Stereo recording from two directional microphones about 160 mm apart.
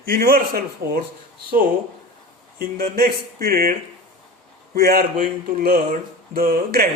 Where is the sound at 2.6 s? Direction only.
65° right (ahead or behind).